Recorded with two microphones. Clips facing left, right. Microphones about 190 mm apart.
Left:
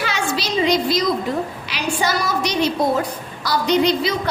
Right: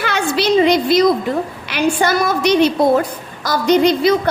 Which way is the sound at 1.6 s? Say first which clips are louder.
Right 6 dB; 55° right (ahead or behind).